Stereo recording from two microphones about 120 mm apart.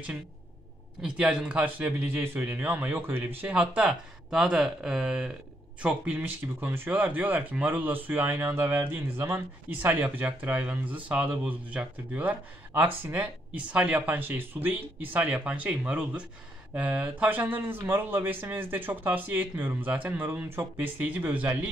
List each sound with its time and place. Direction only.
1.0 s speech: 5° right (ahead or behind)